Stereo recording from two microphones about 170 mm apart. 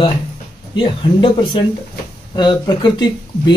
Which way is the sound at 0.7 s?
30° left (ahead or behind).